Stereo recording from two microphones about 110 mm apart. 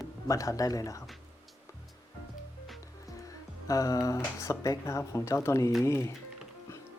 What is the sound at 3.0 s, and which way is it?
Speech, 30° left (ahead or behind).